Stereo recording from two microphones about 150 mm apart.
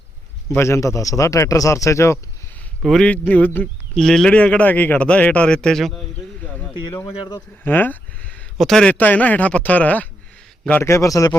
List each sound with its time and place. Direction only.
0.4 s speech: 20° left (ahead or behind)
2.8 s speech: 5° left (ahead or behind)
6.4 s a sound: 10° left (ahead or behind)
7.6 s speech: 15° left (ahead or behind)